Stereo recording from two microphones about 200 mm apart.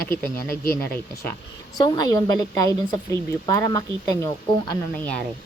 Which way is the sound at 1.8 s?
20° left (ahead or behind).